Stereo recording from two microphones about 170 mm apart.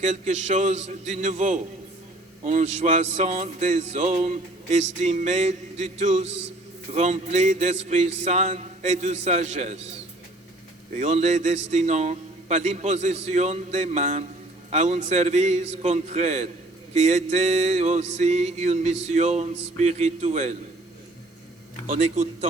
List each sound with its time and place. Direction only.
0.0 s a man's voice: 45° right (ahead or behind)
6.2 s a man's voice: 90° right
6.9 s a man's voice: 40° right (ahead or behind)
21.8 s a man's voice: 45° right (ahead or behind)